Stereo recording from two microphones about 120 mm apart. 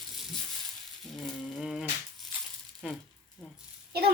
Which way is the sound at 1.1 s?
Centre (ahead or behind).